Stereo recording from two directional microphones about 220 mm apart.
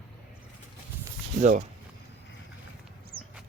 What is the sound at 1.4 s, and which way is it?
Speech, 35° right (ahead or behind).